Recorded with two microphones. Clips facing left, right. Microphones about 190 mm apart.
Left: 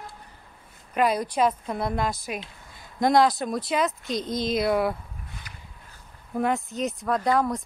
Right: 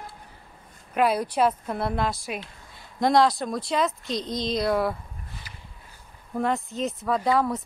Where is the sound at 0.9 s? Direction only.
5° right (ahead or behind).